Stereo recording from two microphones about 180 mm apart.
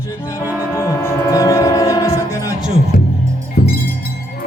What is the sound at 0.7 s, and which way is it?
Music, 15° left (ahead or behind).